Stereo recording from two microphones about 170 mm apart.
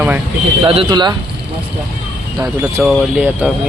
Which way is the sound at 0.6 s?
30° right (ahead or behind).